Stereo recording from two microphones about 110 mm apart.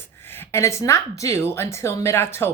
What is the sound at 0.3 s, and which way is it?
A woman's voice, 25° left (ahead or behind).